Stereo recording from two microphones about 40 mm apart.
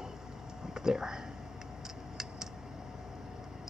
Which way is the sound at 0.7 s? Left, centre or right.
Centre.